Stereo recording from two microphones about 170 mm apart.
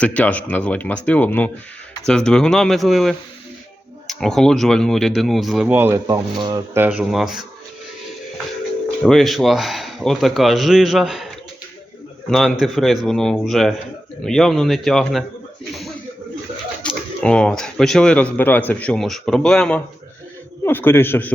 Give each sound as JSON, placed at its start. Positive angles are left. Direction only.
{"t": 0.0, "sound": "speech", "side_deg": 10}
{"t": 6.1, "sound": "speech", "side_deg": -25}
{"t": 6.7, "sound": "speech", "side_deg": -10}
{"t": 9.0, "sound": "speech", "side_deg": 0}
{"t": 12.3, "sound": "speech", "side_deg": 0}
{"t": 16.8, "sound": "speech", "side_deg": 5}